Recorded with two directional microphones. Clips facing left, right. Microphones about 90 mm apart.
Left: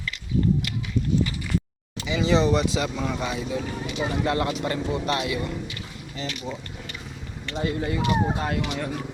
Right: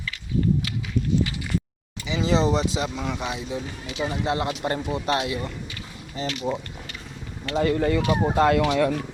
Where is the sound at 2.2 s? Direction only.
35° right (ahead or behind).